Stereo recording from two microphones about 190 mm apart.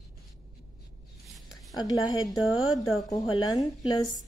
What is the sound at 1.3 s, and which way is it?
Whispering, centre (ahead or behind).